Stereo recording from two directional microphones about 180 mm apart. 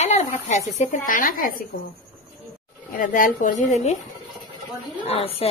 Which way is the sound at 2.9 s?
50° left (ahead or behind).